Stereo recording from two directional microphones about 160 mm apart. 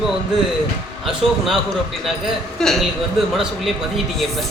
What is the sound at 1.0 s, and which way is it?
A woman's voice, centre (ahead or behind).